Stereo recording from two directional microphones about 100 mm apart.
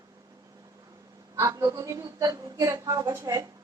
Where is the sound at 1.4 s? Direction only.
30° right (ahead or behind).